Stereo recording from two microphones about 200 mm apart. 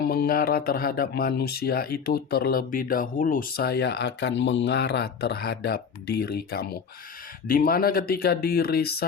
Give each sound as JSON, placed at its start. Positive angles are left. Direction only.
{"t": 0.0, "sound": "speech", "side_deg": 50}